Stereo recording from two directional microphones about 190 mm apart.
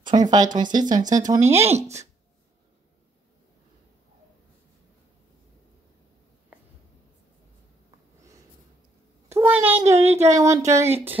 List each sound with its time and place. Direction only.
0.0 s speech: 20° right (ahead or behind)
9.3 s a child's voice: 10° right (ahead or behind)